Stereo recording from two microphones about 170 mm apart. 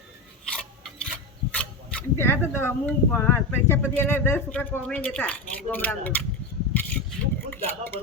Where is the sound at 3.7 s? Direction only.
10° left (ahead or behind).